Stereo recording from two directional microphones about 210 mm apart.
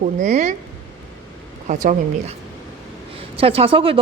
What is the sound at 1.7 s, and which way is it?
Speech, 35° right (ahead or behind).